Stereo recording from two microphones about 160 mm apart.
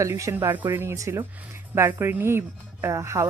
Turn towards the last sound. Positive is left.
turn(degrees=-20)  # may be behind; listen again after turning